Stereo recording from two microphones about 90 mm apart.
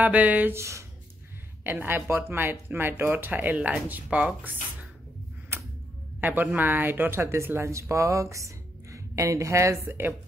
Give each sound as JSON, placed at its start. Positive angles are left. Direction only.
{"t": 0.0, "sound": "speech", "side_deg": -15}
{"t": 0.6, "sound": "speech", "side_deg": -35}
{"t": 5.5, "sound": "tick-tock", "side_deg": -25}
{"t": 6.2, "sound": "speech", "side_deg": -20}